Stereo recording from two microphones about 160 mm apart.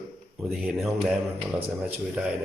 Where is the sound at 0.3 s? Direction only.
5° right (ahead or behind).